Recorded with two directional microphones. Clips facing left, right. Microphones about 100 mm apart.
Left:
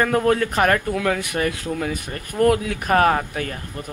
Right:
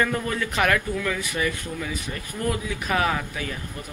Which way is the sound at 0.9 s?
65° left (ahead or behind).